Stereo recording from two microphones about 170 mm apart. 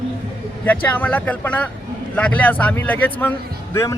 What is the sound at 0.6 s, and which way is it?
Speech, 10° left (ahead or behind).